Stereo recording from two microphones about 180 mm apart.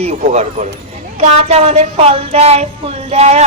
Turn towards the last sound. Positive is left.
turn(degrees=-40)  # may be behind; listen again after turning